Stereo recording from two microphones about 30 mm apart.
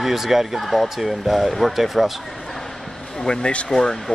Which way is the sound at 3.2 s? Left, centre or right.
Left.